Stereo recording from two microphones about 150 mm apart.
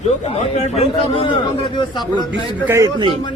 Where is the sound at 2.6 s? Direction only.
20° right (ahead or behind).